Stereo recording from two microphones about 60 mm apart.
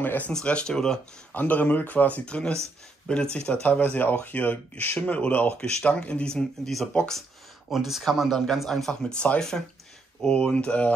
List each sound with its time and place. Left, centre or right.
0.0 s speech: left
0.3 s speech: centre
1.3 s speech: left
2.2 s speech: centre
3.6 s speech: left
5.6 s speech: centre
7.7 s speech: centre
9.2 s speech: left